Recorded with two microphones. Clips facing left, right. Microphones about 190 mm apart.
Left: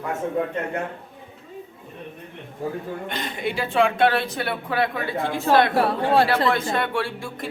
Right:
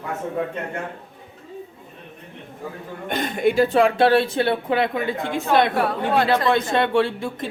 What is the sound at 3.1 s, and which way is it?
Speech, 50° right (ahead or behind).